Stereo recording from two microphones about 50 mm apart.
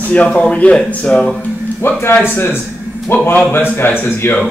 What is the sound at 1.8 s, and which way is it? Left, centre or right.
A man's voice, left.